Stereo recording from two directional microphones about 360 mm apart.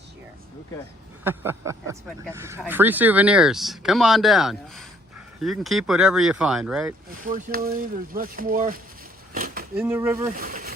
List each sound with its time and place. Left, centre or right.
1.2 s speech: centre
7.3 s speech: right
9.3 s a sound: right
9.9 s speech: centre
10.2 s speech: right